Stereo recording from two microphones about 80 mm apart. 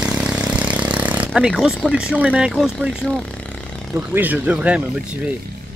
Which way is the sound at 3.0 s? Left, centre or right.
Centre.